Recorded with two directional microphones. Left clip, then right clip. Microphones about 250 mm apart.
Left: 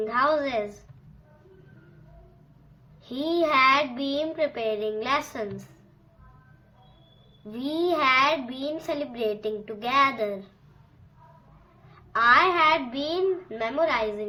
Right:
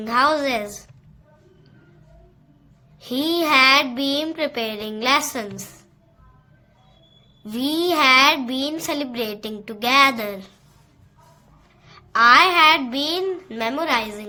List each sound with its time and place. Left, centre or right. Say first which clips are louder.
0.0 s a woman's voice: right 5 dB; right
3.0 s a woman's voice: right 4 dB; right
7.4 s a woman's voice: right 5 dB; right
11.9 s a child's voice: right 6 dB; right